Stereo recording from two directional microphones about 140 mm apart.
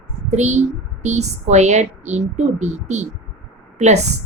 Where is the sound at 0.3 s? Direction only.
55° right (ahead or behind).